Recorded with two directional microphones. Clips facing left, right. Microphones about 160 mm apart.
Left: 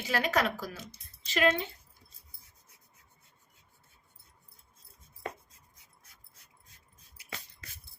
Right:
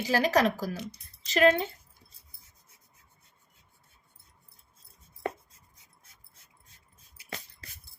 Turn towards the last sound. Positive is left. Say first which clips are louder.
# right 3 dB
turn(degrees=-35)  # may be behind; listen again after turning